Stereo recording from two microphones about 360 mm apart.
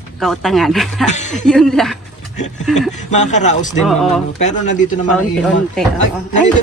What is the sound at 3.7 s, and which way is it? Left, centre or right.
Speech, centre.